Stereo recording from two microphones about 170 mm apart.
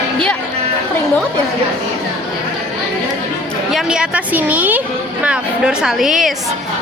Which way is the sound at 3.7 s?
5° right (ahead or behind).